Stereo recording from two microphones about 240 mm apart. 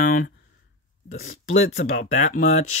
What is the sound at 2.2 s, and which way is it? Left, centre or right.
Speech, left.